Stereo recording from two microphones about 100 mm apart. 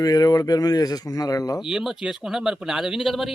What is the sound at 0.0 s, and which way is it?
Speech, 40° left (ahead or behind).